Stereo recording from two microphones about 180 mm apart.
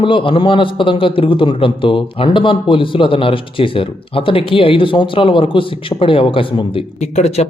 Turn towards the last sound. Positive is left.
turn(degrees=35)  # may be behind; listen again after turning